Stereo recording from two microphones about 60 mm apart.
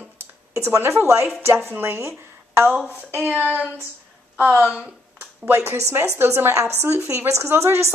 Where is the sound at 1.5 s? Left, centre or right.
Right.